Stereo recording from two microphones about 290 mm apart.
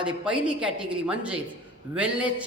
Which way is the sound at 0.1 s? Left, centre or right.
Centre.